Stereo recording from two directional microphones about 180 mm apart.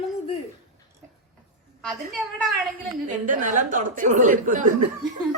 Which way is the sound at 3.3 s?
45° right (ahead or behind).